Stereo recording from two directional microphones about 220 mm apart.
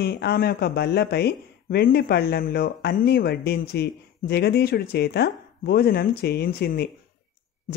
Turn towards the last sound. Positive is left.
turn(degrees=45)  # may be behind; listen again after turning